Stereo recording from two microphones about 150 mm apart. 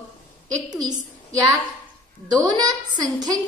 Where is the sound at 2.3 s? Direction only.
25° right (ahead or behind).